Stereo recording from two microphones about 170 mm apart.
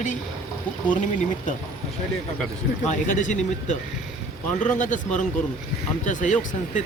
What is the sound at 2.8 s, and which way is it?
Speech, 45° left (ahead or behind).